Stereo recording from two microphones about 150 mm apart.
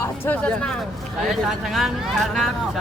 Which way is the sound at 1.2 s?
Centre (ahead or behind).